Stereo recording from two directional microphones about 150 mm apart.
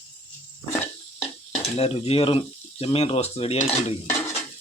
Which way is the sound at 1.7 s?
40° left (ahead or behind).